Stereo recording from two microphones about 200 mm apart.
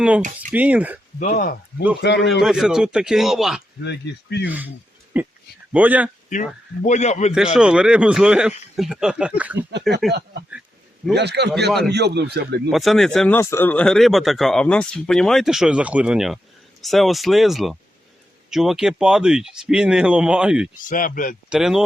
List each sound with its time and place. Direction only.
0.2 s speech: 40° right (ahead or behind)
0.5 s speech: 5° right (ahead or behind)
1.2 s speech: 40° left (ahead or behind)
2.0 s speech: 60° left (ahead or behind)
2.4 s speech: 5° right (ahead or behind)
3.8 s speech: 60° left (ahead or behind)
4.4 s speech: 10° right (ahead or behind)
6.3 s speech: 40° left (ahead or behind)
7.5 s speech: 5° right (ahead or behind)
11.1 s a man's voice: 55° right (ahead or behind)
12.7 s speech: centre (ahead or behind)
20.8 s speech: 40° left (ahead or behind)
21.5 s speech: centre (ahead or behind)